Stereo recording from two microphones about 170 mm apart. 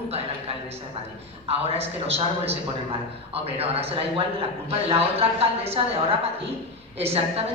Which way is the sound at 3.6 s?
35° right (ahead or behind).